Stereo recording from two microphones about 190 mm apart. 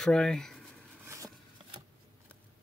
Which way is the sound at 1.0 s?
15° right (ahead or behind).